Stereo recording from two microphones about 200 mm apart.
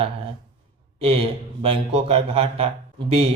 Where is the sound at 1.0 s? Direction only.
30° right (ahead or behind).